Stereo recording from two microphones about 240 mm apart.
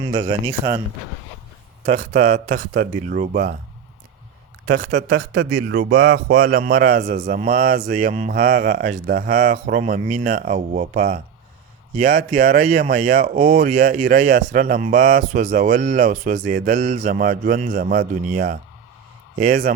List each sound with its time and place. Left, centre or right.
0.1 s speech: right
1.9 s speech: right
4.6 s speech: right